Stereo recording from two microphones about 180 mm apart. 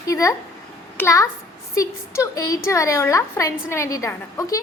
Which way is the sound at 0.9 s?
15° left (ahead or behind).